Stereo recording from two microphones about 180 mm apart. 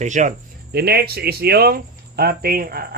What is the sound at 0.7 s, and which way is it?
A man's voice, 60° right (ahead or behind).